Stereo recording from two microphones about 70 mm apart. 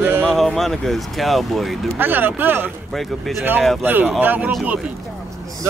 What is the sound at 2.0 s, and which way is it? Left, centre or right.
Speech, right.